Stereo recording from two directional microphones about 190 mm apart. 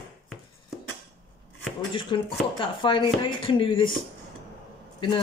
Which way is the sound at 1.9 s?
25° left (ahead or behind).